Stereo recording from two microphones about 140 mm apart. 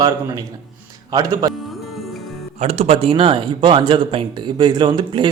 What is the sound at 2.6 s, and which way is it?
Speech, 50° right (ahead or behind).